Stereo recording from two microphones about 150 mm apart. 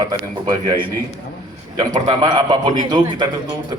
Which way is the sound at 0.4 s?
25° right (ahead or behind).